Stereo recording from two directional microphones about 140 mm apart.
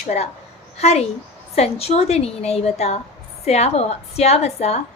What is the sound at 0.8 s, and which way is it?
A woman's voice, 50° left (ahead or behind).